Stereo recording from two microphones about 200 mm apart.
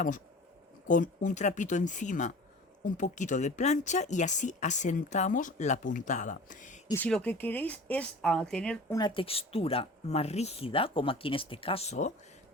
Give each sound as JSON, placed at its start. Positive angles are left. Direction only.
{"t": 0.9, "sound": "speech", "side_deg": 40}
{"t": 6.8, "sound": "speech", "side_deg": 10}
{"t": 9.0, "sound": "speech", "side_deg": 25}